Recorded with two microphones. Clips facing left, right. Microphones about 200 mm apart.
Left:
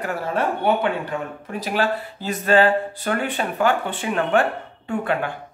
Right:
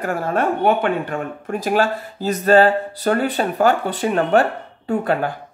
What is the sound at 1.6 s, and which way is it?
Speech, 45° right (ahead or behind).